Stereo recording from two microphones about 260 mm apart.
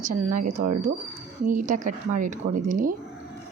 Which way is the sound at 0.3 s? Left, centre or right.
Right.